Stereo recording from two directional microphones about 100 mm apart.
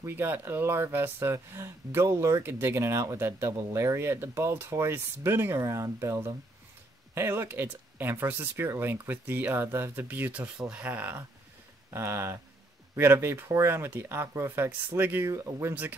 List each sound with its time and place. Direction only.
0.0 s speech: 25° right (ahead or behind)